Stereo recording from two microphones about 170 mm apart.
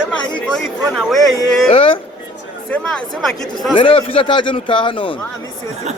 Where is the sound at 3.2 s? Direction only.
Centre (ahead or behind).